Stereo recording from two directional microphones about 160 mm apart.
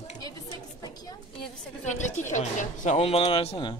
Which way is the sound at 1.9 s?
45° left (ahead or behind).